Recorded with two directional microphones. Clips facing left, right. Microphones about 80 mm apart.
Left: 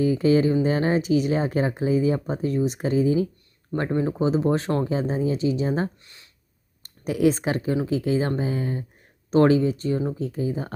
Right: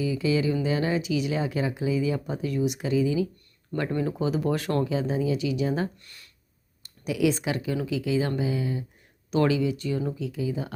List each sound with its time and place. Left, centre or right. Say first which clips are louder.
0.0 s speech: left 6 dB; left
3.8 s speech: left 3 dB; left